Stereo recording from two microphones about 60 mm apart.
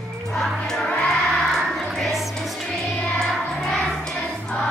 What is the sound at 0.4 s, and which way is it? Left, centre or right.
Music, centre.